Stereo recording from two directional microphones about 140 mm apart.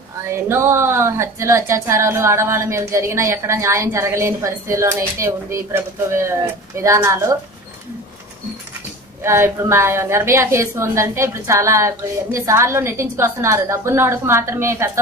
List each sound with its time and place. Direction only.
0.3 s a woman's voice: 20° right (ahead or behind)
9.2 s a woman's voice: 20° right (ahead or behind)